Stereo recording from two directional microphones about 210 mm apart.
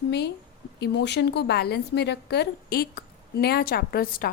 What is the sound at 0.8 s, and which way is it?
A woman's voice, 55° left (ahead or behind).